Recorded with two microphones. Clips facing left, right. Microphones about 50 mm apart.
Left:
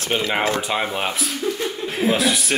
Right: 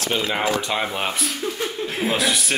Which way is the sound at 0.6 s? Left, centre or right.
Centre.